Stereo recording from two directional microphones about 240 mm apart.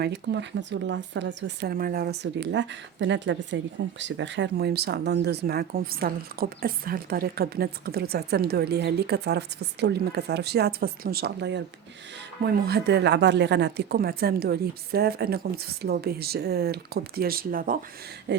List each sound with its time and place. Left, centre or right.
0.0 s speech: right